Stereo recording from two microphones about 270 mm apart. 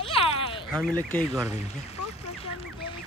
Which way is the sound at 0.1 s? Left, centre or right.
Centre.